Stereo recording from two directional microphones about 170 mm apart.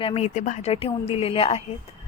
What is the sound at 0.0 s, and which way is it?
A woman's voice, 35° left (ahead or behind).